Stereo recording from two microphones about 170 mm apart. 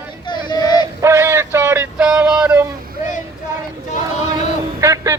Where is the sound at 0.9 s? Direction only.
15° right (ahead or behind).